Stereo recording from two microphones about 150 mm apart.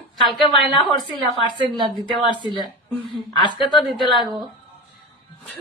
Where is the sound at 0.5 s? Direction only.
35° left (ahead or behind).